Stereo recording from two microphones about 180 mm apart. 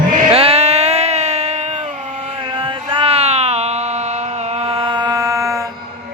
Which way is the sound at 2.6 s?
30° right (ahead or behind).